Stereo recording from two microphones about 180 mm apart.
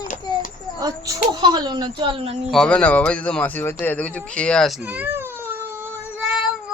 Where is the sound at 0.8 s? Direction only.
20° right (ahead or behind); by 2.5 s 35° right (ahead or behind).